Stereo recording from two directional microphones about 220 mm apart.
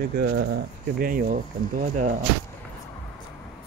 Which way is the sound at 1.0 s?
40° right (ahead or behind).